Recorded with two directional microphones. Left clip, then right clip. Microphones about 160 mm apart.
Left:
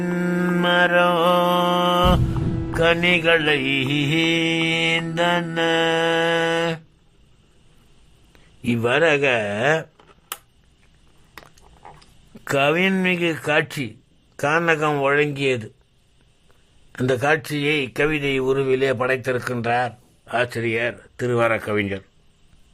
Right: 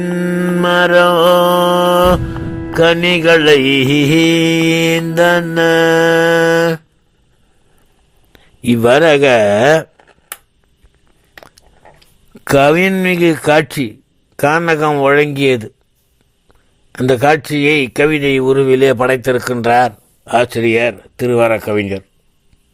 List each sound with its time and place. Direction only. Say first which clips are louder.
0.0 s mantra: right 6 dB; 10° right (ahead or behind)
0.6 s music: right 7 dB; 30° right (ahead or behind)
8.3 s speech: right 9 dB; 25° right (ahead or behind)
12.5 s speech: right 9 dB; 30° right (ahead or behind)
16.9 s speech: right 8 dB; 25° right (ahead or behind)